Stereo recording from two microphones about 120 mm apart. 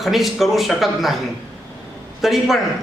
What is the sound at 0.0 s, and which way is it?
A man's voice, centre (ahead or behind).